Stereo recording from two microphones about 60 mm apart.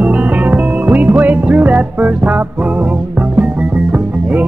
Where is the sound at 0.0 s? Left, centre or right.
Right.